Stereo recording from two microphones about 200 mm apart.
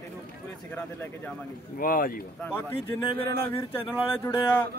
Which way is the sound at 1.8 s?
45° left (ahead or behind).